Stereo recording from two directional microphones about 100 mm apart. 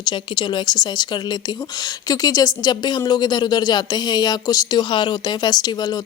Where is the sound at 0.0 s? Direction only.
50° left (ahead or behind).